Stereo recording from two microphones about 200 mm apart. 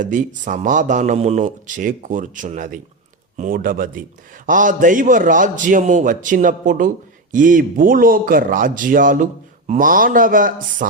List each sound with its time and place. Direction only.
0.0 s a man's voice: 40° right (ahead or behind)